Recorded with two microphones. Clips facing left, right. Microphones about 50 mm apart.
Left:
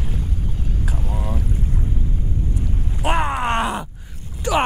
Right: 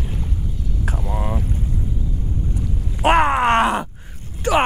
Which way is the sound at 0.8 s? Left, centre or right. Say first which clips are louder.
Right 5 dB; right.